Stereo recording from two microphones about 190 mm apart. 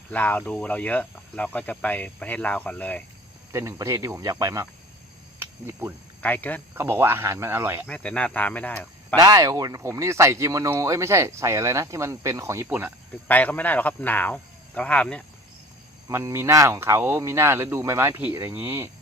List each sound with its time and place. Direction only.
0.1 s speech: 10° left (ahead or behind)
3.5 s speech: 15° right (ahead or behind)
5.4 s cricket: 10° right (ahead or behind)
6.2 s speech: 10° left (ahead or behind)
6.7 s speech: 10° right (ahead or behind)
7.9 s speech: 5° left (ahead or behind)
9.1 s speech: 20° right (ahead or behind)
13.2 s speech: 10° left (ahead or behind)
16.0 s speech: 15° right (ahead or behind)